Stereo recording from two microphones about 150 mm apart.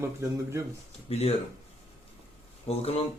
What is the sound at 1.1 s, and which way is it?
Speech, 45° left (ahead or behind).